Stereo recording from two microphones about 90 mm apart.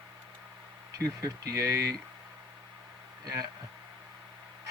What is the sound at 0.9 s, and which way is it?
Speech, 45° right (ahead or behind).